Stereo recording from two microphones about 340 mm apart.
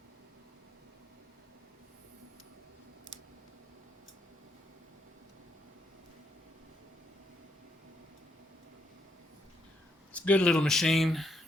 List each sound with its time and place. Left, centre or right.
10.1 s speech: centre